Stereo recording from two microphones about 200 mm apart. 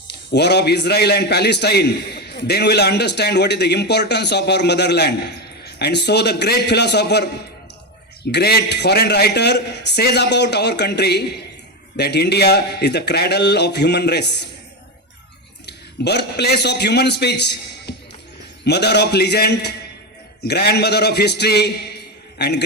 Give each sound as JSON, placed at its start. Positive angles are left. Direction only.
{"t": 0.1, "sound": "a man's voice", "side_deg": 55}
{"t": 8.3, "sound": "a man's voice", "side_deg": 55}
{"t": 15.6, "sound": "a man's voice", "side_deg": 55}